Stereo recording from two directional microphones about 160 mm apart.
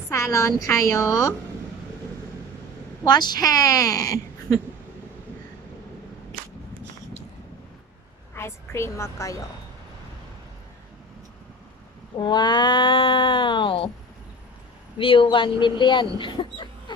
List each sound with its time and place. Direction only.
0.1 s speech: 20° left (ahead or behind)
3.0 s speech: 25° left (ahead or behind)
8.4 s a woman's voice: 15° left (ahead or behind)
12.2 s cat: 30° left (ahead or behind)
14.9 s cat: 30° left (ahead or behind)
15.6 s speech: 30° left (ahead or behind)